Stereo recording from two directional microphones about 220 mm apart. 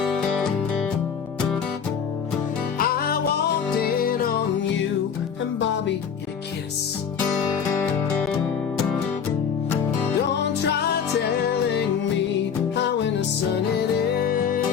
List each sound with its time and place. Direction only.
0.0 s music: centre (ahead or behind)
2.7 s music: 45° left (ahead or behind)
5.5 s music: 55° left (ahead or behind)
7.8 s music: 5° left (ahead or behind)
11.7 s music: 50° left (ahead or behind)
14.2 s music: 40° left (ahead or behind)